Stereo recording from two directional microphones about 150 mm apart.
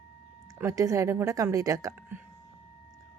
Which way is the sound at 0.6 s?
20° right (ahead or behind).